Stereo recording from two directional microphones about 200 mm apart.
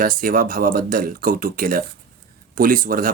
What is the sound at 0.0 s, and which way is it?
Speech, 45° right (ahead or behind).